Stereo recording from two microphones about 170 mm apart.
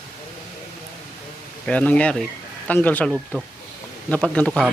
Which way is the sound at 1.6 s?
10° left (ahead or behind).